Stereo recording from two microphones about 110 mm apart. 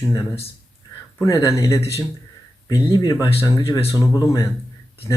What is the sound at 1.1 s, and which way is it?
Speech, 30° left (ahead or behind).